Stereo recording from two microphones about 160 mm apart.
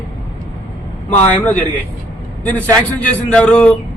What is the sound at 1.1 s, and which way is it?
A man's voice, 10° left (ahead or behind).